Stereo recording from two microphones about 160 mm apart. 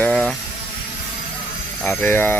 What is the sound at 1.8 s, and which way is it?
Speech, 10° left (ahead or behind).